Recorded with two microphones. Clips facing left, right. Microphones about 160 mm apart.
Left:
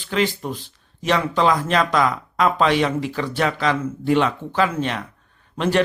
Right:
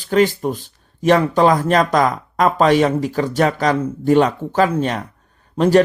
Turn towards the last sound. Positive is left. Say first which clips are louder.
# right 7 dB
turn(degrees=-40)  # may be behind; listen again after turning